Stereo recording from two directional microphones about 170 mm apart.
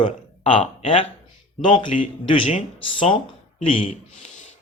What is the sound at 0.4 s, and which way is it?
Speech, 35° left (ahead or behind).